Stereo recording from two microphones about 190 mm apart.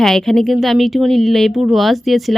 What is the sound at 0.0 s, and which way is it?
Speech, centre (ahead or behind).